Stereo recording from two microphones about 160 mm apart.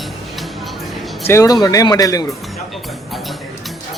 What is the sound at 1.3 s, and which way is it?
Speech, 20° left (ahead or behind).